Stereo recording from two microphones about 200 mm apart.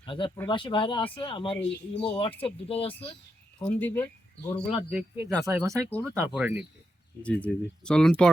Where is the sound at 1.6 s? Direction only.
60° left (ahead or behind).